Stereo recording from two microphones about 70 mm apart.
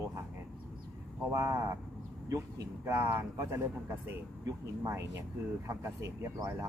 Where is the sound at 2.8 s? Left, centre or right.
Right.